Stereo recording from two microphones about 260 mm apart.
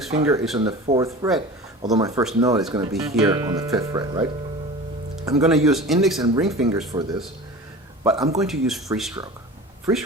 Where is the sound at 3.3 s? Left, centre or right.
Centre.